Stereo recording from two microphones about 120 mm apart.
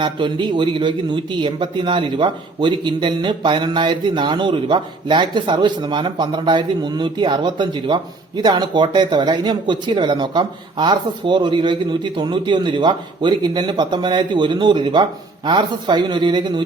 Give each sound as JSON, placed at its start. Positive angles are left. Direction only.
{"t": 0.0, "sound": "a man's voice", "side_deg": -40}